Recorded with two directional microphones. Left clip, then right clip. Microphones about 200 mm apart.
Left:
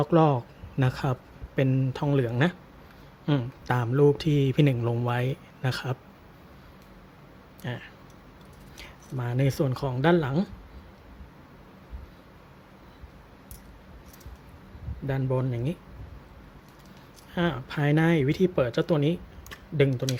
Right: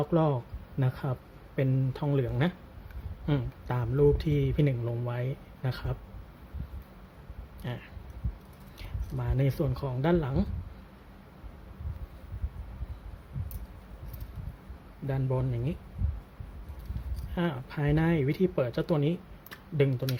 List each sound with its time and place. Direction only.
0.0 s speech: 15° left (ahead or behind)
7.6 s speech: 10° left (ahead or behind)
8.8 s speech: 10° left (ahead or behind)
15.0 s speech: 10° left (ahead or behind)
17.3 s speech: 15° left (ahead or behind)